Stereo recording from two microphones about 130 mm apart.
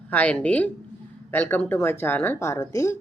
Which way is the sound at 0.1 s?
10° left (ahead or behind).